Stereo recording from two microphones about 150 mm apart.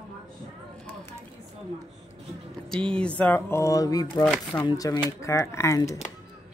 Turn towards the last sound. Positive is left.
turn(degrees=20)  # may be behind; listen again after turning